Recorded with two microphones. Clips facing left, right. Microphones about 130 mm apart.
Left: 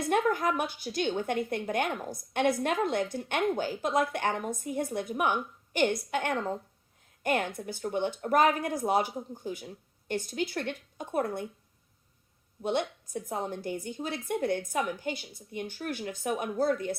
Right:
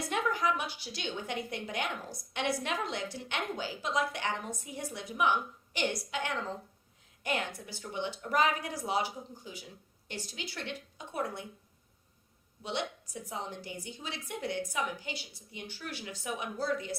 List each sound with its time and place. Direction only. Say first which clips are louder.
0.1 s a woman's voice: left 5 dB; 50° left (ahead or behind)
12.6 s a woman's voice: left 6 dB; 50° left (ahead or behind)